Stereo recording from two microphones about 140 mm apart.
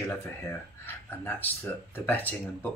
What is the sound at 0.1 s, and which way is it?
Speech, 15° left (ahead or behind).